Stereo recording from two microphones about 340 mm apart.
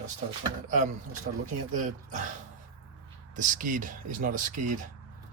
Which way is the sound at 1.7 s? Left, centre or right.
Right.